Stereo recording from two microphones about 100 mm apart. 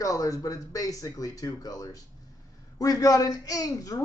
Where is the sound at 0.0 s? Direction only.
35° left (ahead or behind).